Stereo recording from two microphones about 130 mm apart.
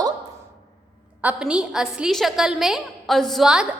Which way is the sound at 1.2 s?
10° right (ahead or behind).